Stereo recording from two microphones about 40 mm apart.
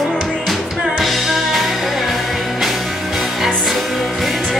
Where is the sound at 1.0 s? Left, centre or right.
Centre.